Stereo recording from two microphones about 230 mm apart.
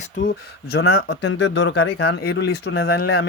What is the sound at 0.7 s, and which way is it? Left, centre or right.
Speech, left.